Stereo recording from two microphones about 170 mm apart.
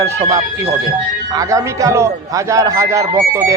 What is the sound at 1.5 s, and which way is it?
Speech, 20° right (ahead or behind).